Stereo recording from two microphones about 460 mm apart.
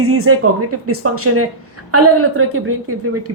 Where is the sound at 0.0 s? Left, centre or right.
Right.